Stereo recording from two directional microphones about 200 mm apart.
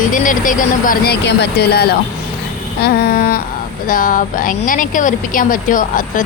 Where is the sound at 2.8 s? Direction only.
50° left (ahead or behind).